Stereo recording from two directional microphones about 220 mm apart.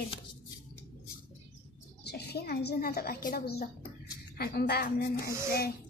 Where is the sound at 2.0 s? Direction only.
50° left (ahead or behind).